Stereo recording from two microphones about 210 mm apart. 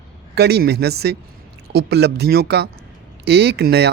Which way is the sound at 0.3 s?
50° right (ahead or behind).